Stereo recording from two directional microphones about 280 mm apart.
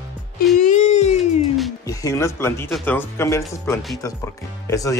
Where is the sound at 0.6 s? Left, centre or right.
Left.